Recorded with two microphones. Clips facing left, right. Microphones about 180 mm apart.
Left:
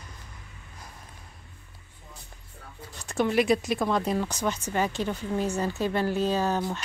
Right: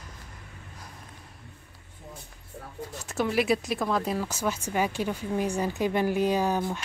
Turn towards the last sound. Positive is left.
turn(degrees=-10)  # may be behind; listen again after turning